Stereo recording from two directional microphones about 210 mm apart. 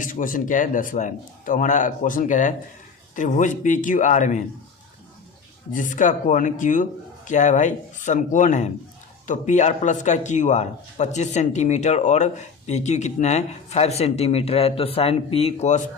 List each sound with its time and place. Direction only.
0.0 s a man's voice: 40° left (ahead or behind)
5.7 s a man's voice: 35° left (ahead or behind)